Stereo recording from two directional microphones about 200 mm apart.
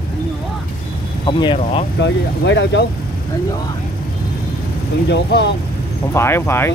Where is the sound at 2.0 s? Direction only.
60° left (ahead or behind).